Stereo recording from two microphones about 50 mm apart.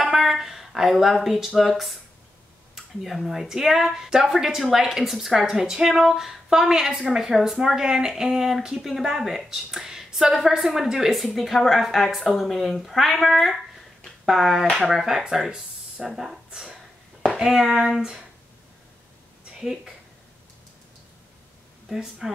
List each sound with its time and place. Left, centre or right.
0.0 s a sound: centre
1.6 s a woman's voice: centre
16.5 s a sound: centre
17.4 s speech: centre
19.6 s a woman's voice: centre
21.8 s speech: centre